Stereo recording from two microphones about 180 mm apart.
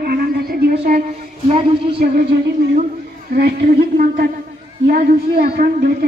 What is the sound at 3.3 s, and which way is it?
A woman's voice, 55° right (ahead or behind).